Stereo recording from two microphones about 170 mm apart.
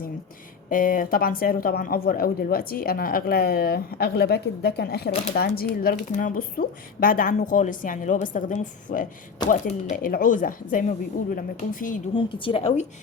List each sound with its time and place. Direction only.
0.7 s speech: 55° left (ahead or behind)
12.1 s a woman's voice: 30° left (ahead or behind)